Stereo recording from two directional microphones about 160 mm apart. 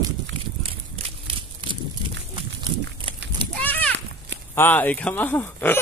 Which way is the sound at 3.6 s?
10° left (ahead or behind).